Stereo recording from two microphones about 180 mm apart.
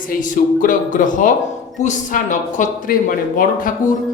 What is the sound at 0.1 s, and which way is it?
Speech, 50° left (ahead or behind).